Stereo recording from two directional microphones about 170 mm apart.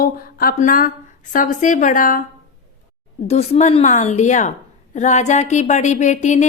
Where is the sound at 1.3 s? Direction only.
50° left (ahead or behind).